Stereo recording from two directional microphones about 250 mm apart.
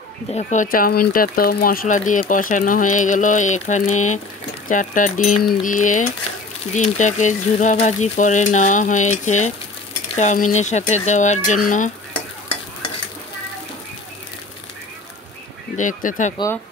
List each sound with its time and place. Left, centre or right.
0.3 s speech: left
15.7 s speech: left